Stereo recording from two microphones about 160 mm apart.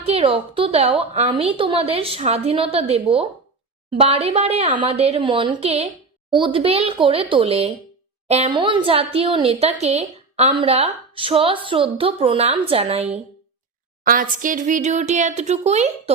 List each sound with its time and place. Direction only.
0.0 s a woman's voice: 40° right (ahead or behind)
14.0 s speech: 60° right (ahead or behind); by 16.1 s 40° right (ahead or behind)